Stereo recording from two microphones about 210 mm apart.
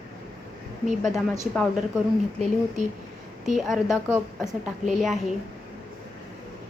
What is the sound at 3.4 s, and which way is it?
A woman's voice, centre (ahead or behind).